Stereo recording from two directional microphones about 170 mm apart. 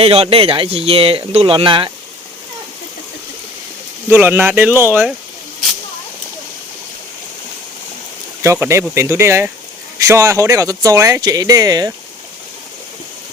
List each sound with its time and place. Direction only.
0.0 s speech: 35° right (ahead or behind)
4.1 s speech: 10° right (ahead or behind)
8.4 s speech: 15° right (ahead or behind)